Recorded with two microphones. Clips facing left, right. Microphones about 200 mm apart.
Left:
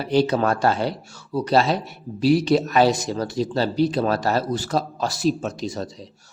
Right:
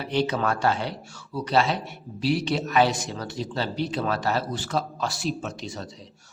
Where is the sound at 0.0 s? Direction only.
40° left (ahead or behind).